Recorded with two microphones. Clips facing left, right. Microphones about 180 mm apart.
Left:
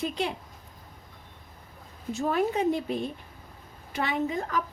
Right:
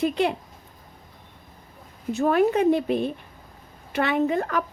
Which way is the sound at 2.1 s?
65° right (ahead or behind).